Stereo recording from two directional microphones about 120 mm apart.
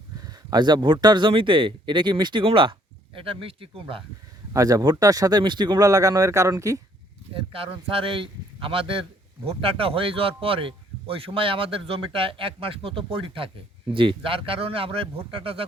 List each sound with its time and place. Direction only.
0.2 s a sound: 35° right (ahead or behind)
1.0 s a man's voice: 40° right (ahead or behind)
4.5 s speech: 30° right (ahead or behind)
7.3 s a man's voice: 50° right (ahead or behind)